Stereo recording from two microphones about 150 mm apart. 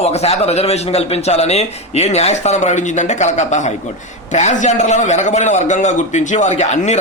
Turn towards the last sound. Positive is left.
turn(degrees=50)  # may be behind; listen again after turning